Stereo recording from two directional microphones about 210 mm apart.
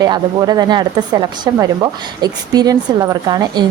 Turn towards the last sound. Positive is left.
turn(degrees=-20)  # may be behind; listen again after turning